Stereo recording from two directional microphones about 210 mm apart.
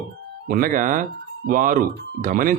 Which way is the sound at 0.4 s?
40° right (ahead or behind).